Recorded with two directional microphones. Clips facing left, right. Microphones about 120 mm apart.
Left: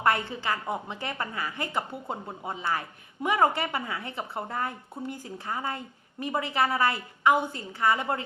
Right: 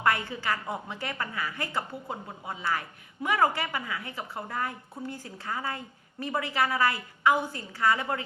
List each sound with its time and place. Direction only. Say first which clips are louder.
0.0 s a woman's voice: left 1 dB; 25° left (ahead or behind)